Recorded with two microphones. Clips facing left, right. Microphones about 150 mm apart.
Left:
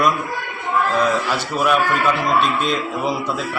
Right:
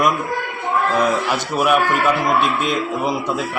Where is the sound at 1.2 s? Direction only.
15° right (ahead or behind).